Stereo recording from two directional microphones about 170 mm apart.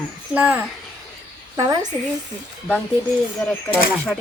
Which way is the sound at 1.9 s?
20° left (ahead or behind).